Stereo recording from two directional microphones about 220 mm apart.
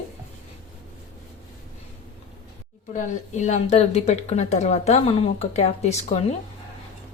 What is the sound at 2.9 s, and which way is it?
Speech, 35° left (ahead or behind).